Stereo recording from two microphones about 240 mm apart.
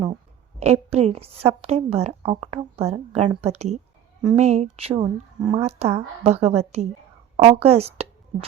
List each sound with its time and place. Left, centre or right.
0.6 s speech: right